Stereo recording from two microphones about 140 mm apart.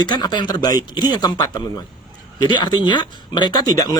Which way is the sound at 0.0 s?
30° left (ahead or behind).